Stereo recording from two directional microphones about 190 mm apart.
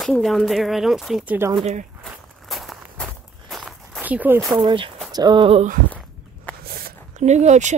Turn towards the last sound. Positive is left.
turn(degrees=-40)  # may be behind; listen again after turning